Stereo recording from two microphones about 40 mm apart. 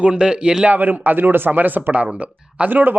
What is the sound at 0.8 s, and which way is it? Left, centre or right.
Speech, right.